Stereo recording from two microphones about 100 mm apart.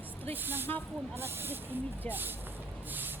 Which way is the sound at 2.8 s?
20° right (ahead or behind).